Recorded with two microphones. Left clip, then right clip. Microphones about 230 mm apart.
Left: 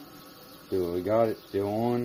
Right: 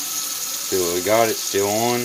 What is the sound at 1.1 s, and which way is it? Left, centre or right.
Speech, centre.